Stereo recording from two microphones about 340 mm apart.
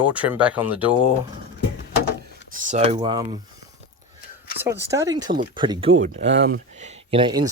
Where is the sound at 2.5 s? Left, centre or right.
Right.